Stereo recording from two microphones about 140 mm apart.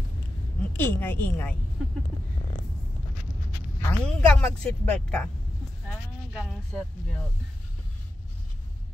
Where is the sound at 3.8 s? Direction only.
10° left (ahead or behind).